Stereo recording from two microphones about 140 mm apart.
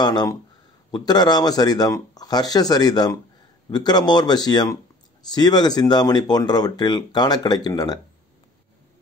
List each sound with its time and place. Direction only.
0.0 s speech: 30° left (ahead or behind)